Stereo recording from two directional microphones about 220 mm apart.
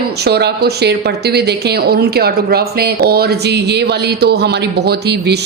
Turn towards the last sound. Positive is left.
turn(degrees=-50)  # may be behind; listen again after turning